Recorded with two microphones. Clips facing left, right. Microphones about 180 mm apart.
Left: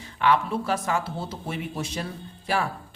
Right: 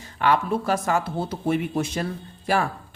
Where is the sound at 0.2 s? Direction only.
45° right (ahead or behind).